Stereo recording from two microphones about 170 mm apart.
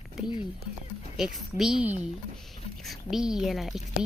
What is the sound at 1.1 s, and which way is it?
Speech, centre (ahead or behind).